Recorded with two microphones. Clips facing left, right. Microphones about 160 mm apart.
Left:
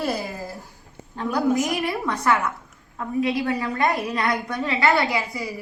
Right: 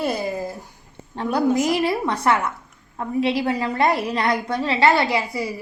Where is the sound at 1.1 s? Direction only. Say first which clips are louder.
Right 2 dB; 30° right (ahead or behind).